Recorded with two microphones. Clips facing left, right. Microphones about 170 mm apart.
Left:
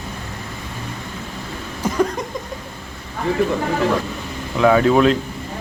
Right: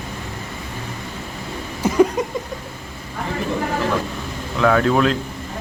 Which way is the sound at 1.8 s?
5° right (ahead or behind).